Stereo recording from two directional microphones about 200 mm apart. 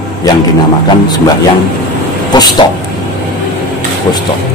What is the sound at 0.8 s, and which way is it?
Speech, 20° left (ahead or behind).